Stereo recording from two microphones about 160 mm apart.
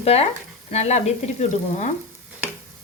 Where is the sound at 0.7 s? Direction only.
45° left (ahead or behind).